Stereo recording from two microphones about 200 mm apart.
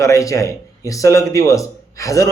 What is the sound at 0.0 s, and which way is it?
Speech, 15° left (ahead or behind).